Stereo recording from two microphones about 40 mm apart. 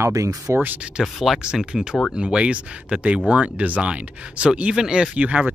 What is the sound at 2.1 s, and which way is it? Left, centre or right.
Speech, right.